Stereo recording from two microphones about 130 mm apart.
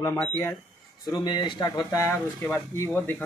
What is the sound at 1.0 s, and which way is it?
Speech, 30° left (ahead or behind).